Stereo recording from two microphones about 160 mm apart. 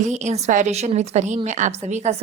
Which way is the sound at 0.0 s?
45° right (ahead or behind).